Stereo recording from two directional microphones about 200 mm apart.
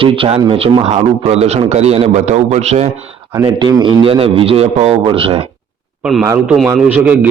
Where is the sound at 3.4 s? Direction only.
20° right (ahead or behind).